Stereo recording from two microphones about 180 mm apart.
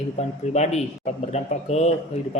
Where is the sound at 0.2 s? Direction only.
40° left (ahead or behind).